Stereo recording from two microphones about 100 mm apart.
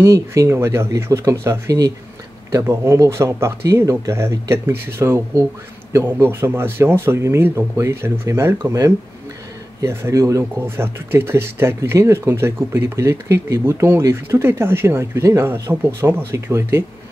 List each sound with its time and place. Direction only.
0.0 s speech: 30° right (ahead or behind)